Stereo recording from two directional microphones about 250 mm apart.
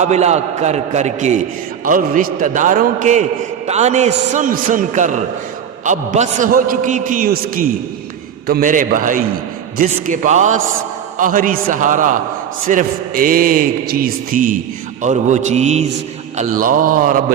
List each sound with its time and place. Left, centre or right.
0.0 s a man's voice: right